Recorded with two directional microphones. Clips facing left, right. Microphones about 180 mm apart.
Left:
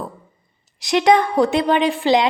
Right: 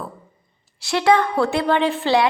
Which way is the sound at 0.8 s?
20° left (ahead or behind).